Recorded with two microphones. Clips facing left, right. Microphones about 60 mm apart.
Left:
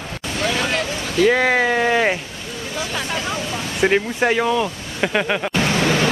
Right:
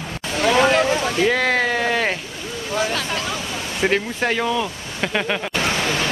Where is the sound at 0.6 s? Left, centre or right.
Right.